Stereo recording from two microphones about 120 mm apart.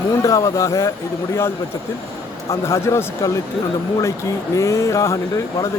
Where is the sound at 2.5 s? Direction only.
25° left (ahead or behind).